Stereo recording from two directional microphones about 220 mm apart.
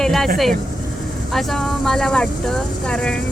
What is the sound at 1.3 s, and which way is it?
Speech, centre (ahead or behind).